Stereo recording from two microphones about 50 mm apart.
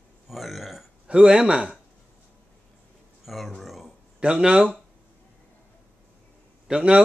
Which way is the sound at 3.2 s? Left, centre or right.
Centre.